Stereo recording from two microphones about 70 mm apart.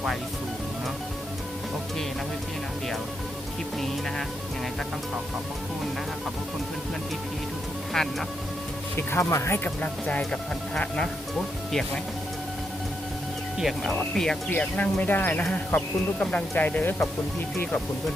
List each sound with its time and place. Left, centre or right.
7.9 s speech: centre
9.1 s speech: left
9.6 s speech: centre
13.6 s speech: centre
14.5 s speech: left